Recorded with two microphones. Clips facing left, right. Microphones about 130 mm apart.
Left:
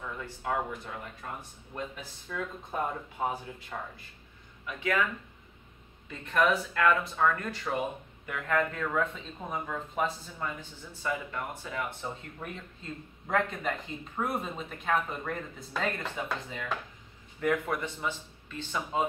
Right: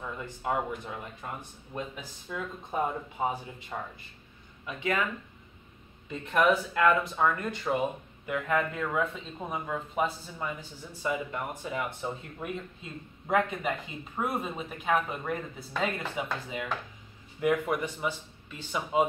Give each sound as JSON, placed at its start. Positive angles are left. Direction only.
{"t": 0.2, "sound": "speech", "side_deg": -15}
{"t": 6.0, "sound": "speech", "side_deg": -10}